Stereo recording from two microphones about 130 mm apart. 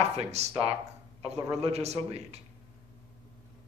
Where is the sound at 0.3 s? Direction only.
55° right (ahead or behind).